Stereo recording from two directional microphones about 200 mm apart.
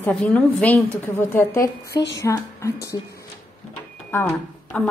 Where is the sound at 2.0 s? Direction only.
60° left (ahead or behind).